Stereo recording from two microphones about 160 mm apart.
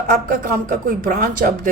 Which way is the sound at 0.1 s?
60° right (ahead or behind).